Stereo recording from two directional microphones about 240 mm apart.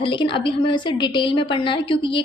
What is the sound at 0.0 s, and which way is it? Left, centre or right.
A woman's voice, left.